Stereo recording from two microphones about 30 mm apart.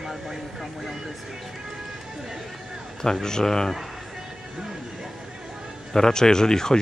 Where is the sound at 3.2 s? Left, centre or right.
Left.